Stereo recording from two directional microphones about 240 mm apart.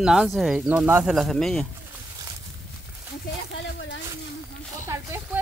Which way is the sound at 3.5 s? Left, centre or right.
Left.